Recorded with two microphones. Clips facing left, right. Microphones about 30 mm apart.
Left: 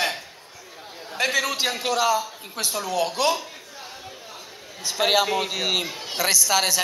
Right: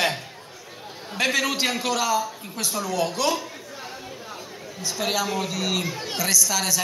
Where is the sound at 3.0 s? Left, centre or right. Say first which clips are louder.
Left 2 dB; left.